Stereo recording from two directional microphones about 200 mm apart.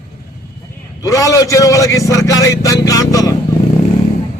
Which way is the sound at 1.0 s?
15° left (ahead or behind).